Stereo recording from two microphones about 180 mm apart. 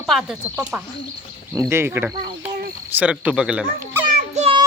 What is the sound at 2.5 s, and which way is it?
Cricket, 55° right (ahead or behind).